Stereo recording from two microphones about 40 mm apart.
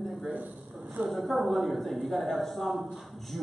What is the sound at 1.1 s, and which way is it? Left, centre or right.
A man's voice, centre.